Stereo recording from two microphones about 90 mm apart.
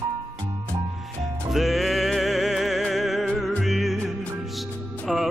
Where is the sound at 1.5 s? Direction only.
Centre (ahead or behind).